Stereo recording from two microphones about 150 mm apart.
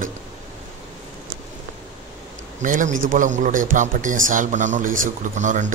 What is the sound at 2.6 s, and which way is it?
A man's voice, 60° right (ahead or behind).